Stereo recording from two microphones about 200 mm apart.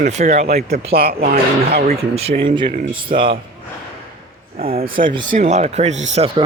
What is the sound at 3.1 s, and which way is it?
Speech, 40° right (ahead or behind).